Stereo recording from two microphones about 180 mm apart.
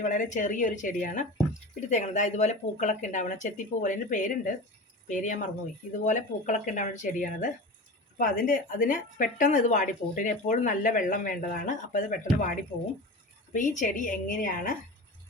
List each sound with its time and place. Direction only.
0.0 s a woman's voice: 45° left (ahead or behind)